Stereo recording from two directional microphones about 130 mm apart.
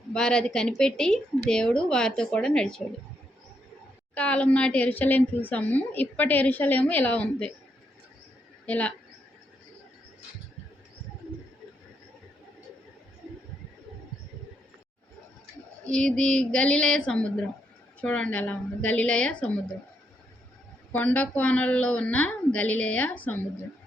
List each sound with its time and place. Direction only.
0.1 s speech: 5° left (ahead or behind)
4.1 s a woman's voice: 10° left (ahead or behind)
8.6 s speech: 10° left (ahead or behind)
15.9 s a woman's voice: 5° left (ahead or behind)
20.9 s a woman's voice: 10° left (ahead or behind)